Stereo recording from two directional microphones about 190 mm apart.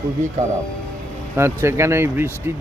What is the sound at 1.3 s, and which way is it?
Speech, 15° right (ahead or behind).